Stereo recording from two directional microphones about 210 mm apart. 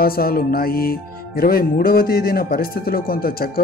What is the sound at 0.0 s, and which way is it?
Music, 45° left (ahead or behind).